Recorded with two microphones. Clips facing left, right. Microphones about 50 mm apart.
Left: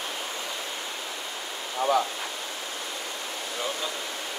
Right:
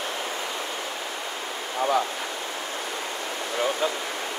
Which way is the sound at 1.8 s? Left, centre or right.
Right.